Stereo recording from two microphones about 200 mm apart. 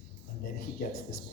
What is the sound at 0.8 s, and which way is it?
Speech, 50° left (ahead or behind).